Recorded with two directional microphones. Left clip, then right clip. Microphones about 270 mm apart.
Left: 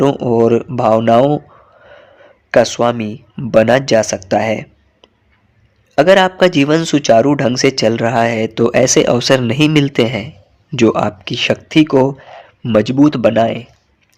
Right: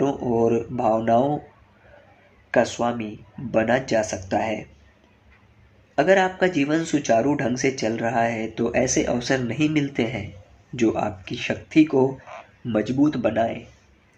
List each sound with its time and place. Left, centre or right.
0.0 s speech: left
2.5 s speech: left
6.0 s speech: left